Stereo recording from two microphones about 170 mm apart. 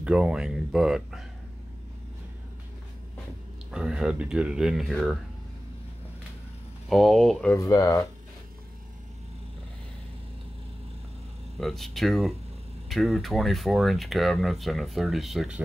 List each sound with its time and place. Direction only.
0.0 s speech: 5° right (ahead or behind)
3.7 s speech: 5° right (ahead or behind)
6.9 s speech: centre (ahead or behind)
7.5 s speech: 20° left (ahead or behind)
11.5 s speech: centre (ahead or behind)